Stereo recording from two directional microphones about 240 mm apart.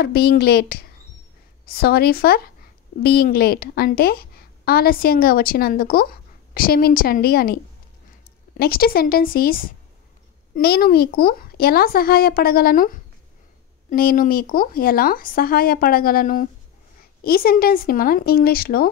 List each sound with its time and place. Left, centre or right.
0.0 s a woman's voice: left